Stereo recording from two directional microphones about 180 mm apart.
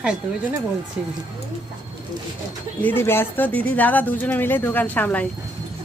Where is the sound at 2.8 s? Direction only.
10° left (ahead or behind).